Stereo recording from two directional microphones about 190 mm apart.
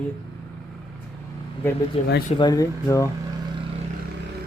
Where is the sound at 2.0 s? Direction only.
35° left (ahead or behind).